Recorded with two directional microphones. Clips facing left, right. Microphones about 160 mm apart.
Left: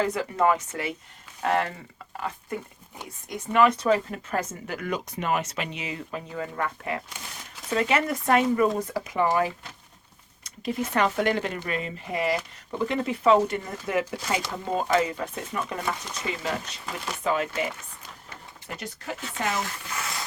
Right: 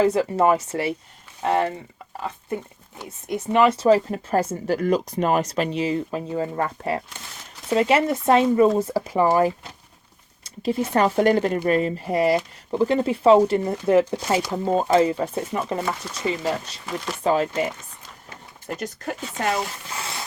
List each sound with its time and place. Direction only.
0.0 s speech: 30° right (ahead or behind)
3.2 s speech: 30° right (ahead or behind)
18.7 s speech: 45° right (ahead or behind)
19.5 s speech: 30° right (ahead or behind)